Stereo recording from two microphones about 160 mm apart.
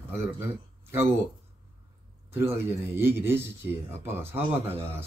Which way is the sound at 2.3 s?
15° right (ahead or behind).